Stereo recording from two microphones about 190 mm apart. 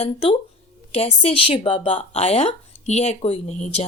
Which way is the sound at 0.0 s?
30° left (ahead or behind).